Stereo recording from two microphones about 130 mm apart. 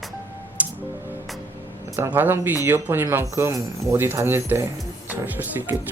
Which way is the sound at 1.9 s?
15° right (ahead or behind).